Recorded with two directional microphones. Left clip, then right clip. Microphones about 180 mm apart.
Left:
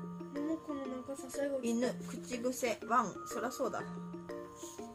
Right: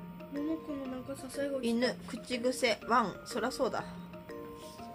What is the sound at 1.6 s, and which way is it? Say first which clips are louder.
Speech: right 3 dB; 30° right (ahead or behind).